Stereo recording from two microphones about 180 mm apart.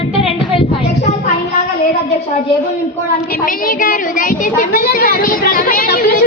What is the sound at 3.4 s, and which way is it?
A child's voice, 50° left (ahead or behind).